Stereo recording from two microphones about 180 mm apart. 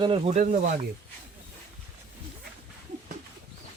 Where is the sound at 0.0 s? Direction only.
30° right (ahead or behind).